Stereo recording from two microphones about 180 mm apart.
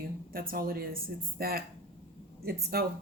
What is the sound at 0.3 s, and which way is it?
A woman's voice, 55° right (ahead or behind).